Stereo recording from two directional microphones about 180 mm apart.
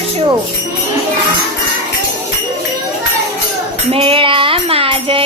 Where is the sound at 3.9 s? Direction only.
30° right (ahead or behind).